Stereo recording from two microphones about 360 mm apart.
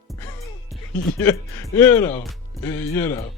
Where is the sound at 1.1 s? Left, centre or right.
Centre.